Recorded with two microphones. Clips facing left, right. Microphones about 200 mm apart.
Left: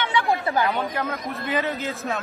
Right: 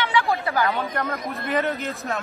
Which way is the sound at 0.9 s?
Centre (ahead or behind).